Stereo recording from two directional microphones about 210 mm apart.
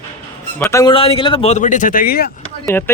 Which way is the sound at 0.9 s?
25° left (ahead or behind).